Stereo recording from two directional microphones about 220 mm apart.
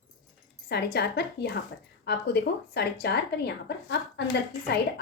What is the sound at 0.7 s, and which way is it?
A woman's voice, 45° left (ahead or behind).